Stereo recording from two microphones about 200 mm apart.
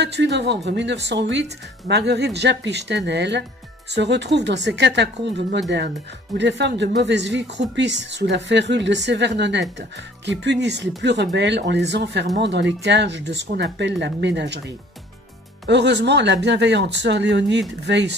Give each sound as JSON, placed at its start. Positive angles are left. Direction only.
{"t": 0.0, "sound": "speech", "side_deg": -60}
{"t": 15.6, "sound": "speech", "side_deg": -60}